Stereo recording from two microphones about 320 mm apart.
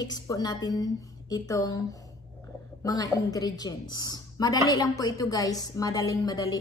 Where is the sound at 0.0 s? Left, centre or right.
Centre.